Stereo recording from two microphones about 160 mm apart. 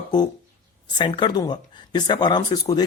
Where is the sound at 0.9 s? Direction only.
30° left (ahead or behind).